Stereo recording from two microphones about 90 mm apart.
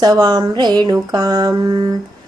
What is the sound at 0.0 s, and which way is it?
Mantra, 45° right (ahead or behind).